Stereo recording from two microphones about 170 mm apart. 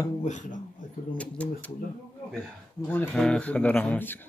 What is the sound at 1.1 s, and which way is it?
Speech, 5° left (ahead or behind).